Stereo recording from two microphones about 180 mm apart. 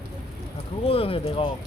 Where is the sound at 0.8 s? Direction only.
30° left (ahead or behind).